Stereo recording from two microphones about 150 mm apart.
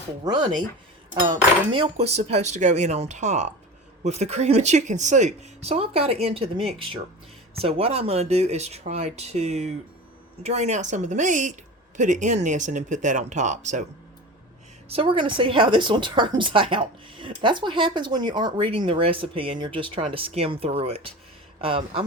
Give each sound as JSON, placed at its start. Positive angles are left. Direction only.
{"t": 0.2, "sound": "speech", "side_deg": -30}
{"t": 14.8, "sound": "speech", "side_deg": -35}